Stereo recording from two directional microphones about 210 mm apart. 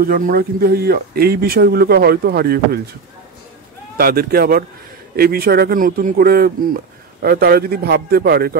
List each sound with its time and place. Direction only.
0.0 s speech: 45° right (ahead or behind)
3.9 s speech: 45° right (ahead or behind)